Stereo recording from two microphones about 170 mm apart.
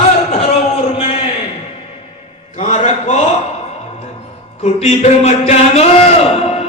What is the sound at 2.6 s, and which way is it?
Mantra, 40° left (ahead or behind).